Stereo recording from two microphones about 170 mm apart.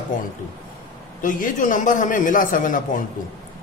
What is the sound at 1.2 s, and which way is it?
A man's voice, 50° left (ahead or behind).